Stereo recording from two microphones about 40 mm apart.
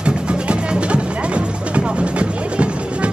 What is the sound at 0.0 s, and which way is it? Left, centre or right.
Music, right.